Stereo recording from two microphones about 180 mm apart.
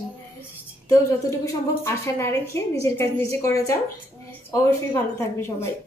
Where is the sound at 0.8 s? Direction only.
20° left (ahead or behind).